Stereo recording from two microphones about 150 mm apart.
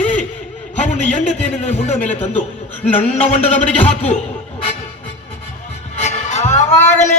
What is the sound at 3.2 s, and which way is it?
A man's voice, 40° left (ahead or behind).